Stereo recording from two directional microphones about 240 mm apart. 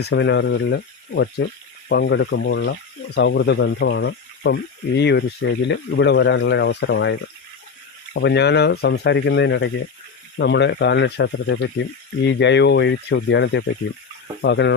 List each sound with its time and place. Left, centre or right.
0.0 s speech: left